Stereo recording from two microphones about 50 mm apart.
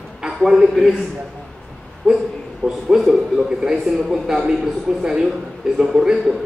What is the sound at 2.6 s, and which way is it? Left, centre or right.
Speech, centre.